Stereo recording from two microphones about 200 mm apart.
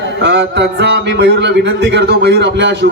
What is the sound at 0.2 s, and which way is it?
A man's voice, 60° right (ahead or behind).